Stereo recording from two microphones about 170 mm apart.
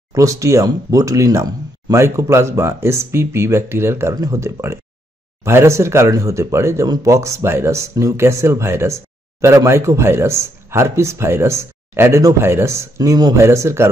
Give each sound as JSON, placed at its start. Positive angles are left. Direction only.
{"t": 0.1, "sound": "speech", "side_deg": -20}